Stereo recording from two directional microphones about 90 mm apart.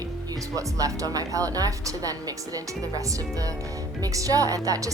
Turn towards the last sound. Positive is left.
turn(degrees=-40)  # may be behind; listen again after turning